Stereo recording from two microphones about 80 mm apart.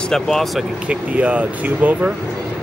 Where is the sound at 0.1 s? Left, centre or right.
Centre.